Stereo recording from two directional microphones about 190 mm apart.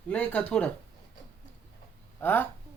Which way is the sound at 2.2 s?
10° left (ahead or behind).